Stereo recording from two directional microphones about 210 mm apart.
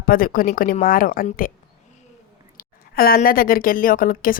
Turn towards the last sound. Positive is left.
turn(degrees=40)  # may be behind; listen again after turning